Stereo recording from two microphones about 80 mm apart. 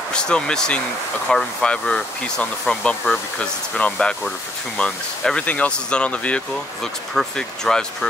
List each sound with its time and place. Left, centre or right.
0.1 s speech: centre